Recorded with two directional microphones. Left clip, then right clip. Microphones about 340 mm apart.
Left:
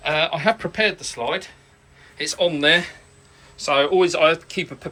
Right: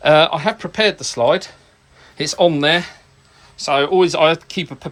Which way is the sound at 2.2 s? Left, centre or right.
Centre.